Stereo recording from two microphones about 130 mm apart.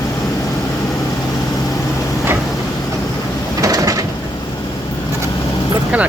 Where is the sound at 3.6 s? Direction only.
25° right (ahead or behind).